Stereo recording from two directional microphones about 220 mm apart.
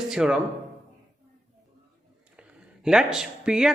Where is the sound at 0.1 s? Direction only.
Centre (ahead or behind).